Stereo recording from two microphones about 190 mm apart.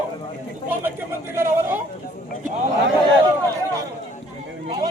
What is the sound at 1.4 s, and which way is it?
Speech, 10° right (ahead or behind).